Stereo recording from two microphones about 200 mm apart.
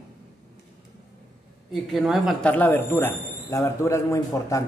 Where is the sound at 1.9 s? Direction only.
Centre (ahead or behind).